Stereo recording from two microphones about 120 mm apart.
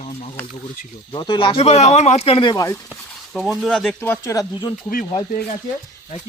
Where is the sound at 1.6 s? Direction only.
65° left (ahead or behind).